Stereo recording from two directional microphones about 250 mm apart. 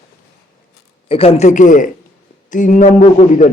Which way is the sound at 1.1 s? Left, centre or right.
Left.